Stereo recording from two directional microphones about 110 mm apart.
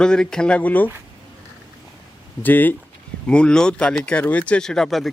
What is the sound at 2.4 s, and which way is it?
Speech, 15° left (ahead or behind).